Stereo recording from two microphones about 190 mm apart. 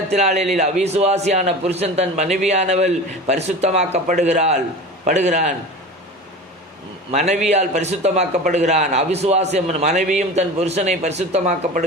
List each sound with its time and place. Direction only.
0.1 s a man's voice: 35° right (ahead or behind)
7.1 s a man's voice: 40° right (ahead or behind)